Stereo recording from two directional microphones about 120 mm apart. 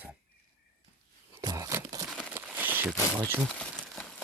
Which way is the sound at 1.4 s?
30° right (ahead or behind).